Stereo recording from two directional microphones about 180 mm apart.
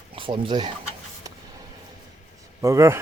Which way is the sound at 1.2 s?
20° right (ahead or behind).